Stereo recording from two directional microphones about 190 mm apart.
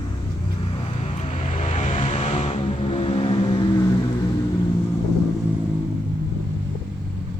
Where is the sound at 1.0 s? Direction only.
35° left (ahead or behind).